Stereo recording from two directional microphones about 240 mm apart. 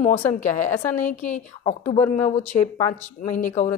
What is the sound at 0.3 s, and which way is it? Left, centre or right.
Speech, left.